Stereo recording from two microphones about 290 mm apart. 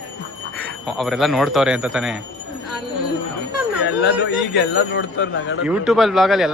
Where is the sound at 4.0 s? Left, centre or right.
Left.